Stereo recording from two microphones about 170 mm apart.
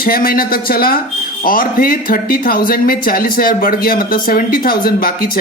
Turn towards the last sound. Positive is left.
turn(degrees=60)  # may be behind; listen again after turning